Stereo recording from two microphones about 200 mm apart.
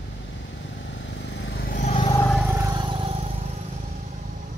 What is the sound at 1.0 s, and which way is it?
Vehicle, 60° left (ahead or behind).